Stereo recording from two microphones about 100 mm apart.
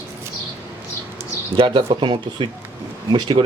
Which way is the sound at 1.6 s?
55° right (ahead or behind).